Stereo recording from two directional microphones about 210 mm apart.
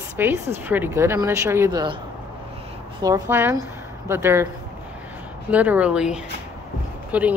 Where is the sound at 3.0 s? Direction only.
10° right (ahead or behind).